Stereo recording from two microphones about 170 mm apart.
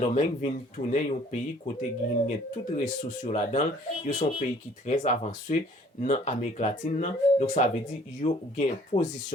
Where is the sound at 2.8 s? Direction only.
45° left (ahead or behind).